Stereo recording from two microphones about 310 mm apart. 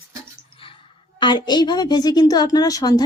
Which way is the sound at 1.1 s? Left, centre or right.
Centre.